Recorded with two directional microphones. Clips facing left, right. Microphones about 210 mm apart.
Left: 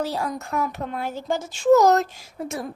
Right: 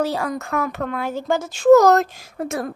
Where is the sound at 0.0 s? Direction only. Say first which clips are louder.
Right 4 dB; 75° right (ahead or behind).